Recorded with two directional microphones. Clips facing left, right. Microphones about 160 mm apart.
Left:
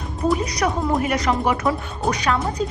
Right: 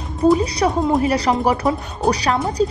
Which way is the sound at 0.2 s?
30° right (ahead or behind).